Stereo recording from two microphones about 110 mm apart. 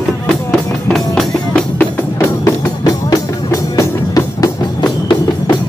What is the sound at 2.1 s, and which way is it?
Music, 25° left (ahead or behind).